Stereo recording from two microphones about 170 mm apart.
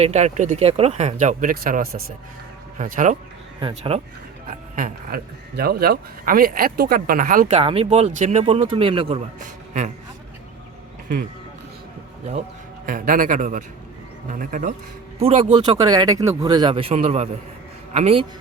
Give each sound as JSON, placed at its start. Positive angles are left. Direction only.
{"t": 0.0, "sound": "speech", "side_deg": -40}
{"t": 2.7, "sound": "speech", "side_deg": -50}
{"t": 3.6, "sound": "speech", "side_deg": -35}
{"t": 4.4, "sound": "speech", "side_deg": -55}
{"t": 7.5, "sound": "speech", "side_deg": -35}
{"t": 9.4, "sound": "a man's voice", "side_deg": -45}
{"t": 12.3, "sound": "speech", "side_deg": -45}
{"t": 15.2, "sound": "speech", "side_deg": -35}
{"t": 15.8, "sound": "speech", "side_deg": -25}